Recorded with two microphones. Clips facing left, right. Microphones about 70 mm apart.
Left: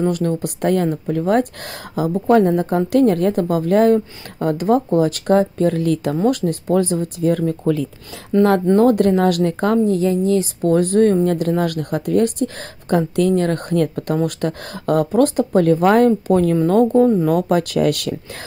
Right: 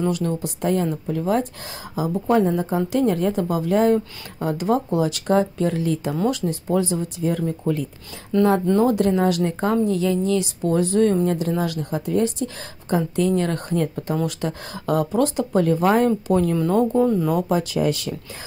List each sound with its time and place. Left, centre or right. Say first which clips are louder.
0.0 s a woman's voice: left 4 dB; left
8.7 s a woman's voice: left 5 dB; left
9.8 s speech: left 4 dB; left
10.6 s a woman's voice: left 4 dB; left
17.0 s speech: left 5 dB; left
17.3 s speech: left 4 dB; left